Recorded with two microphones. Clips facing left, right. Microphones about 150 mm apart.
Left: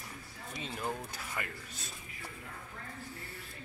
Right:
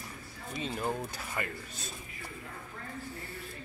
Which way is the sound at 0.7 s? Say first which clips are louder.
Right 4 dB; 20° right (ahead or behind).